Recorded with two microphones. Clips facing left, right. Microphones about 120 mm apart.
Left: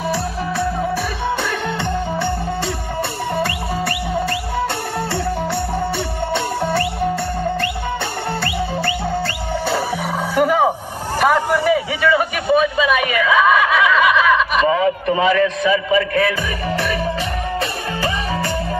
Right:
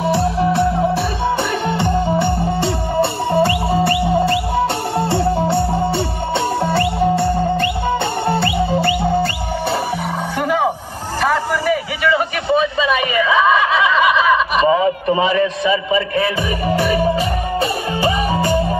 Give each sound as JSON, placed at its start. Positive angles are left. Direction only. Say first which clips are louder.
{"t": 0.0, "sound": "music", "louder": "right 6 dB", "side_deg": -20}
{"t": 8.3, "sound": "whistle", "louder": "right 6 dB", "side_deg": -25}
{"t": 10.3, "sound": "music", "louder": "left 4 dB", "side_deg": 10}
{"t": 11.1, "sound": "a sound", "louder": "left 2 dB", "side_deg": 15}
{"t": 12.5, "sound": "snicker", "louder": "left 1 dB", "side_deg": 5}
{"t": 18.0, "sound": "music", "louder": "right 5 dB", "side_deg": -15}